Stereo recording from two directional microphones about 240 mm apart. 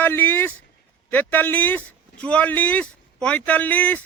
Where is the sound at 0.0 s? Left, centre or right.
Centre.